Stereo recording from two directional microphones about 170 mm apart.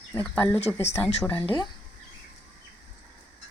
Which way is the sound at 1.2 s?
10° left (ahead or behind).